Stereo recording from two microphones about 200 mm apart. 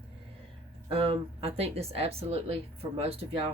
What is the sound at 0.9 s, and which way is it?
Speech, 30° right (ahead or behind).